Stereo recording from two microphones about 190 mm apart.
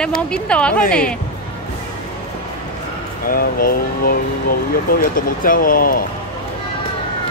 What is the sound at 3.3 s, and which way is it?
Speech, 50° left (ahead or behind).